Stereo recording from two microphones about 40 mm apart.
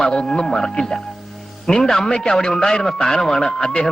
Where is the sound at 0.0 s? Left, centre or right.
Centre.